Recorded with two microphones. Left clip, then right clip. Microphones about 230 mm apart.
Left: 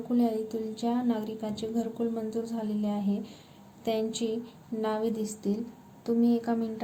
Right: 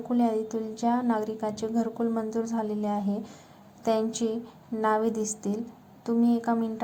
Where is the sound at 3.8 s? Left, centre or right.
Right.